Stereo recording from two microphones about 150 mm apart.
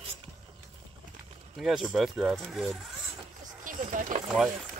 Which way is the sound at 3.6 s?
65° right (ahead or behind).